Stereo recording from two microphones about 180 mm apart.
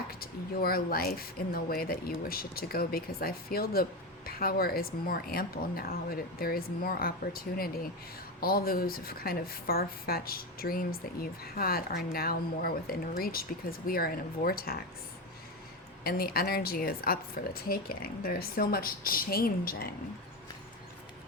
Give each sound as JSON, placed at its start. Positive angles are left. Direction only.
{"t": 0.1, "sound": "a woman's voice", "side_deg": 55}
{"t": 16.0, "sound": "a woman's voice", "side_deg": 55}